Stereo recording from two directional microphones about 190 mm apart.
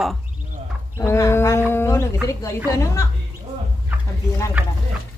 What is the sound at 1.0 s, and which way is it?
A woman's voice, 15° left (ahead or behind).